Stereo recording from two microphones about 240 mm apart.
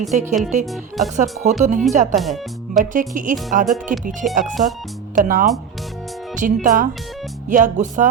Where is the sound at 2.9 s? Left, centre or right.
Right.